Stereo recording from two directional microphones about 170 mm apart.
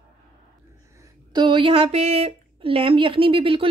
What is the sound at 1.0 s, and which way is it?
Speech, 25° right (ahead or behind).